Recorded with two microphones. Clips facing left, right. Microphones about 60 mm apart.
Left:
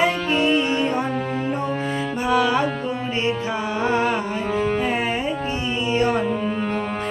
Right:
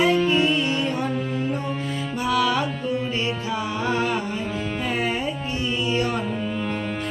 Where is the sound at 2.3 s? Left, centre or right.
Left.